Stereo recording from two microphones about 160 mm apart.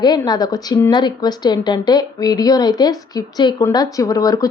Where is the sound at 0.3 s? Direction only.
25° left (ahead or behind).